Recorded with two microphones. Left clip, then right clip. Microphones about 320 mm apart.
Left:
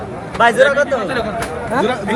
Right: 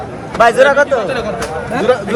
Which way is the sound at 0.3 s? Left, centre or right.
Right.